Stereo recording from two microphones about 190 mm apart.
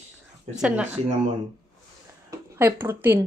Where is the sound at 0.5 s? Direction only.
5° right (ahead or behind).